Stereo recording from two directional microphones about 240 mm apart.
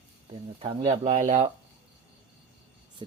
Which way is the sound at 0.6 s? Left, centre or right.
Right.